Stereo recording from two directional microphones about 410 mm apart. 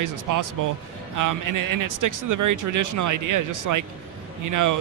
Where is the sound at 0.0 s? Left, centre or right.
Right.